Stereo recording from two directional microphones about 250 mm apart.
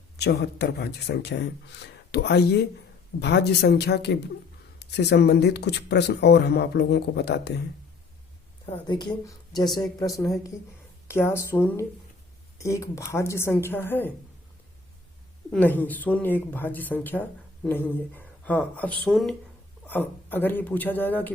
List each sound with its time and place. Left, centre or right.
0.2 s speech: left
8.9 s speech: centre
15.5 s speech: centre